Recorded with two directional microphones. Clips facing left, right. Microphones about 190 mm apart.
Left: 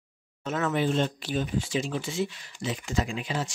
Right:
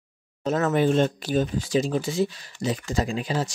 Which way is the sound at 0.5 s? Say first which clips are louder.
Right 5 dB; 40° right (ahead or behind).